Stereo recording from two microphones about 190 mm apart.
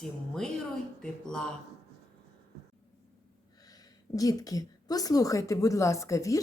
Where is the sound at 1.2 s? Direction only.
5° left (ahead or behind).